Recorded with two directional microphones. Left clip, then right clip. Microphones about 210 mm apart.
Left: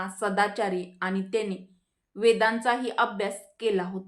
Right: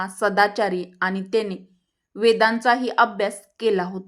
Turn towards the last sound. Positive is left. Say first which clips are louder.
# right 5 dB
turn(degrees=-40)  # may be behind; listen again after turning